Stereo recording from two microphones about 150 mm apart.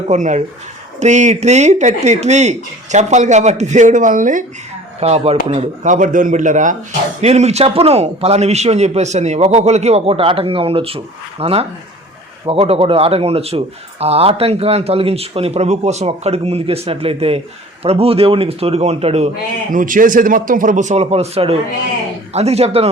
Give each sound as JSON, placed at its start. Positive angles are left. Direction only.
{"t": 0.1, "sound": "a man's voice", "side_deg": -55}
{"t": 4.9, "sound": "a man's voice", "side_deg": -45}
{"t": 19.7, "sound": "a man's voice", "side_deg": -60}